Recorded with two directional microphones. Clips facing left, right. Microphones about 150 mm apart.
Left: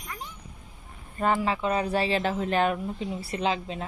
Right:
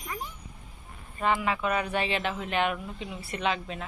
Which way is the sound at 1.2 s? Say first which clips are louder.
Left 2 dB; 35° left (ahead or behind).